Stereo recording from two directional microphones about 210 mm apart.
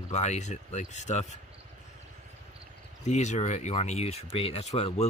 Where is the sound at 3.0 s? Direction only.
35° left (ahead or behind).